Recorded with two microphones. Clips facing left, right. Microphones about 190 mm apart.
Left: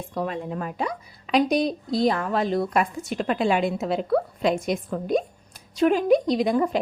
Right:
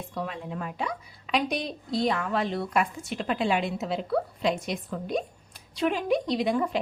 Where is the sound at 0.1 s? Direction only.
45° left (ahead or behind).